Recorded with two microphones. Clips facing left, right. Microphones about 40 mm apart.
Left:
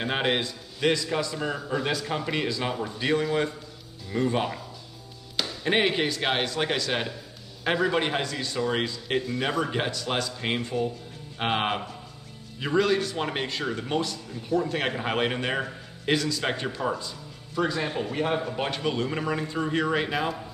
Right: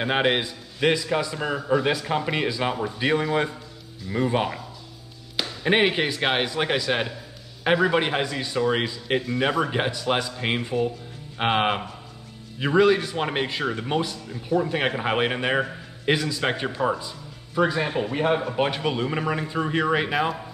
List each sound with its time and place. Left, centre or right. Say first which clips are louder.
0.0 s a man's voice: right 4 dB; centre